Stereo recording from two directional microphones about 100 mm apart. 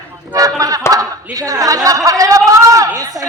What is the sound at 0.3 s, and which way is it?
Chuckle, 35° right (ahead or behind).